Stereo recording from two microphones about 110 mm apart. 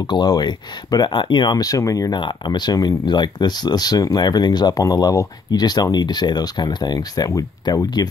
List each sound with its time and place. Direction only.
0.0 s speech: 40° left (ahead or behind)